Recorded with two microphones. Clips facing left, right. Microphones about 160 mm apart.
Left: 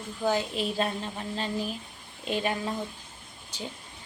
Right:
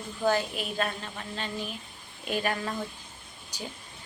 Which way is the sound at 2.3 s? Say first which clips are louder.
Left 1 dB; 25° left (ahead or behind).